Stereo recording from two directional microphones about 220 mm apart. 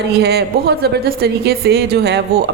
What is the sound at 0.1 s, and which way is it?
A woman's voice, 45° right (ahead or behind).